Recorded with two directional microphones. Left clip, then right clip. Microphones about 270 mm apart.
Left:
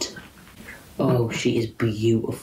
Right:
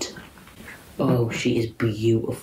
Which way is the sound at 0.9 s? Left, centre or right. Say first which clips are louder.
Left 1 dB; centre.